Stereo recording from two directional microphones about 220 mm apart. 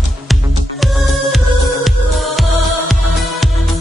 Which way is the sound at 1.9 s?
Centre (ahead or behind).